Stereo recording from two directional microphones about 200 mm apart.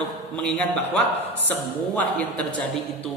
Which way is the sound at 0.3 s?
5° left (ahead or behind).